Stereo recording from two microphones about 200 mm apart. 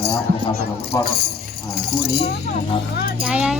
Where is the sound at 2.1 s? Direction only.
30° left (ahead or behind).